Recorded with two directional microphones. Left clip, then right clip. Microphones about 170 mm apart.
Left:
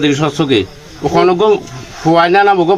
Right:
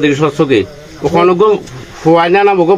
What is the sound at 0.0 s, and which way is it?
Speech, 20° left (ahead or behind).